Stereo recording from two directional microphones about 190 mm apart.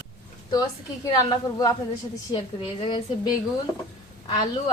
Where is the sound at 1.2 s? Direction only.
20° left (ahead or behind).